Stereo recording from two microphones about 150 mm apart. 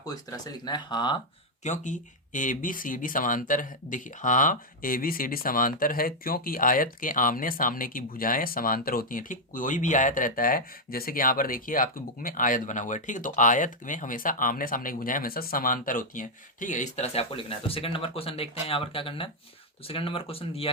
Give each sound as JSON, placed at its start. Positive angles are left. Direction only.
{"t": 0.0, "sound": "speech", "side_deg": 25}
{"t": 1.6, "sound": "speech", "side_deg": 55}